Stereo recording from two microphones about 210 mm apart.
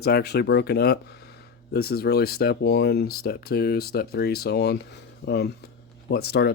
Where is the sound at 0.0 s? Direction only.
50° left (ahead or behind).